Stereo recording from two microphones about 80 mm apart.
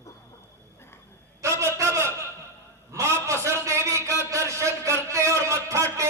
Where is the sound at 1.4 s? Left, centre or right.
Right.